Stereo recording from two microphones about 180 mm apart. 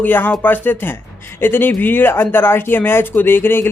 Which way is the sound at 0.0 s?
10° left (ahead or behind).